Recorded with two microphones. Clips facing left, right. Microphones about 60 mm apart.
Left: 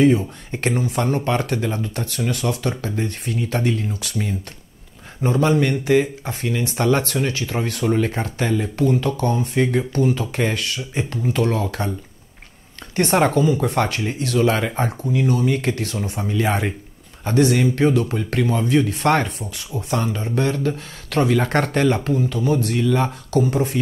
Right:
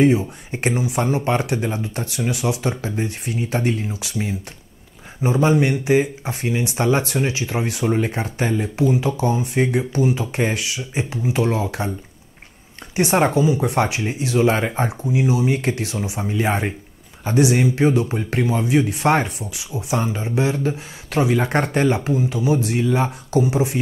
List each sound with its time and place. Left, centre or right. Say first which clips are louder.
0.1 s speech: even; centre
12.9 s speech: even; centre
14.7 s speech: even; centre